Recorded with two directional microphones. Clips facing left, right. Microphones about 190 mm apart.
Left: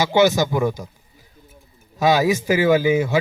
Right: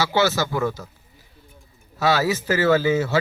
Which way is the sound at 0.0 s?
15° left (ahead or behind).